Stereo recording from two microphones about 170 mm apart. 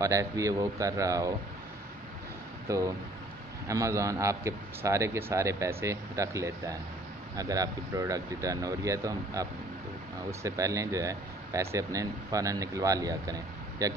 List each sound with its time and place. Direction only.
0.0 s speech: 20° right (ahead or behind)
2.7 s a man's voice: 15° right (ahead or behind)